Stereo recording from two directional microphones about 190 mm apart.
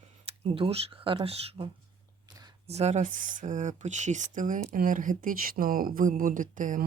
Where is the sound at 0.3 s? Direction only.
30° right (ahead or behind).